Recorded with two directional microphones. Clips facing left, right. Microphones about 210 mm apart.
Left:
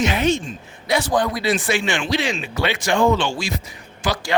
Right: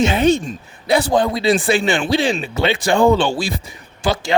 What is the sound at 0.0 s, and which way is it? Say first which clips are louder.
A man's voice: right 5 dB; 30° right (ahead or behind).